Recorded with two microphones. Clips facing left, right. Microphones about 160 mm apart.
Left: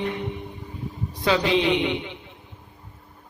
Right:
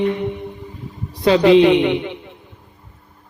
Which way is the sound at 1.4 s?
60° right (ahead or behind).